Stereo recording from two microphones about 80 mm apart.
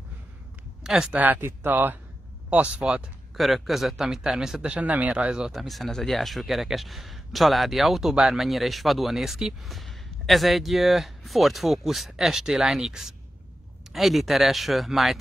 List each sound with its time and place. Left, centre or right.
0.8 s speech: centre
1.1 s speech: right
3.3 s speech: centre
4.6 s speech: centre